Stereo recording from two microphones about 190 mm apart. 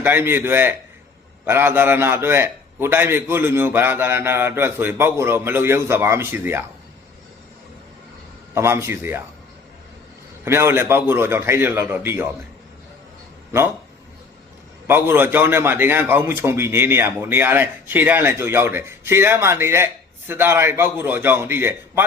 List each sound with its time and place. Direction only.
0.0 s a man's voice: 10° right (ahead or behind)
8.5 s a man's voice: 15° right (ahead or behind)
10.4 s a man's voice: 15° right (ahead or behind)
14.8 s a man's voice: 10° right (ahead or behind)